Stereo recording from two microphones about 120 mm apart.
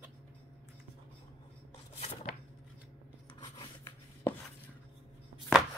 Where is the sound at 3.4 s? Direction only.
40° left (ahead or behind).